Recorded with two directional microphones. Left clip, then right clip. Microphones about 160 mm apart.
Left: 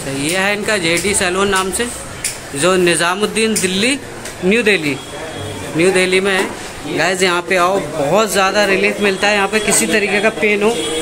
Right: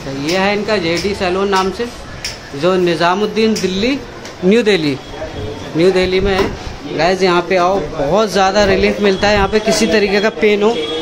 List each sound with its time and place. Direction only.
0.2 s speech: 5° right (ahead or behind)
4.5 s speech: 35° right (ahead or behind)
5.8 s speech: 10° right (ahead or behind)
8.4 s speech: 20° right (ahead or behind)